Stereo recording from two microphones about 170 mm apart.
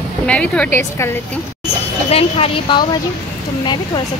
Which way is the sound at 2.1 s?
35° left (ahead or behind).